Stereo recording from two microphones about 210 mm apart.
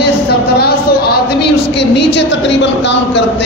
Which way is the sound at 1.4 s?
55° left (ahead or behind).